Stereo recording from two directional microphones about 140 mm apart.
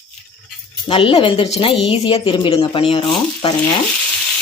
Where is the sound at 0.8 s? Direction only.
40° left (ahead or behind).